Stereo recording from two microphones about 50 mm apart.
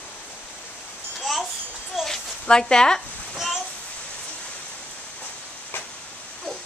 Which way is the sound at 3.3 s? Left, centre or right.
Centre.